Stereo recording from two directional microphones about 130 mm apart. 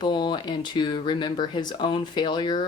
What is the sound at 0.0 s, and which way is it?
Speech, 35° left (ahead or behind).